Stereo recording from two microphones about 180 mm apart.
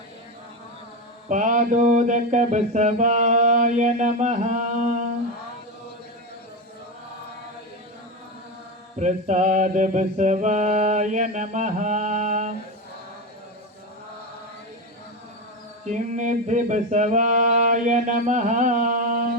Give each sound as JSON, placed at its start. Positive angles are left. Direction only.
{"t": 1.3, "sound": "mantra", "side_deg": -45}
{"t": 9.0, "sound": "mantra", "side_deg": -40}
{"t": 15.8, "sound": "mantra", "side_deg": -40}